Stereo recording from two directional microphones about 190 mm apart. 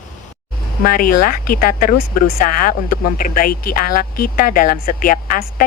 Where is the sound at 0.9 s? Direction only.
50° left (ahead or behind).